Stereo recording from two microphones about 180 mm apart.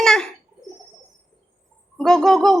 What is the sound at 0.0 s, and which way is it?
Bird, 5° left (ahead or behind).